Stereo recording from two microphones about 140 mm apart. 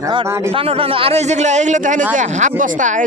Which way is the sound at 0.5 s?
45° right (ahead or behind).